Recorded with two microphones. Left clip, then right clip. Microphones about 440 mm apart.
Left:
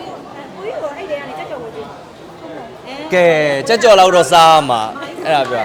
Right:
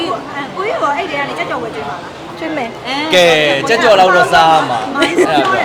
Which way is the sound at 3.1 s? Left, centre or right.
Left.